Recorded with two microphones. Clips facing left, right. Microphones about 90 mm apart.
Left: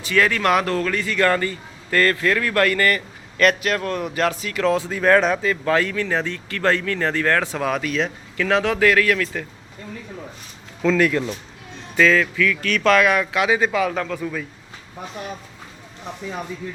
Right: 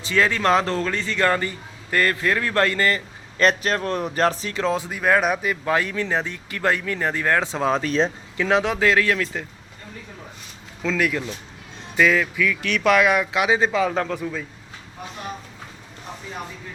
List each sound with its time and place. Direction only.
0.0 s speech: 25° right (ahead or behind)
4.6 s speech: 20° right (ahead or behind)
8.4 s speech: 20° right (ahead or behind)
10.8 s speech: 5° right (ahead or behind); by 14.2 s 30° right (ahead or behind)
14.2 s speech: 20° right (ahead or behind)